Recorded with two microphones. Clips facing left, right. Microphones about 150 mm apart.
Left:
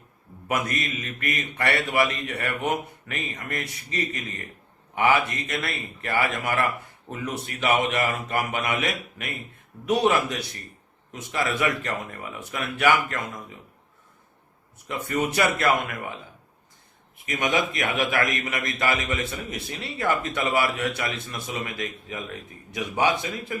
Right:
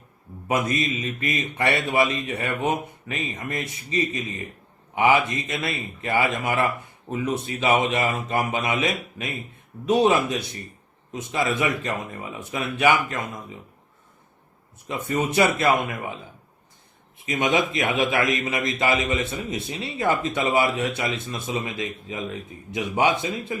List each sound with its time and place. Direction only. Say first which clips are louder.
0.4 s a man's voice: right 4 dB; 20° right (ahead or behind)
14.8 s a man's voice: right 1 dB; 20° right (ahead or behind)
17.2 s a man's voice: right 3 dB; 25° right (ahead or behind)